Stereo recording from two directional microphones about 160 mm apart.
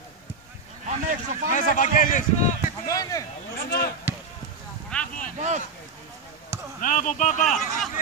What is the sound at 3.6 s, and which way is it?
Basketball bounce, 75° left (ahead or behind).